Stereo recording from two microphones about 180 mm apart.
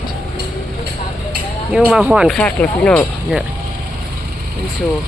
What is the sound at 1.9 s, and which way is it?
Speech, 5° right (ahead or behind).